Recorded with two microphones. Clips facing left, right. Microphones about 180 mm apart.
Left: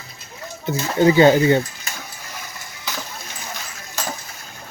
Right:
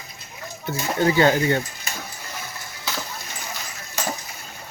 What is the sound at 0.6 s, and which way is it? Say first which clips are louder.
Speech: left 5 dB; 20° left (ahead or behind).